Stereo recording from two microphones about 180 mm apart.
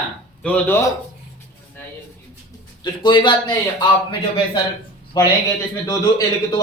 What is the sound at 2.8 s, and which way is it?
Speech, 25° left (ahead or behind).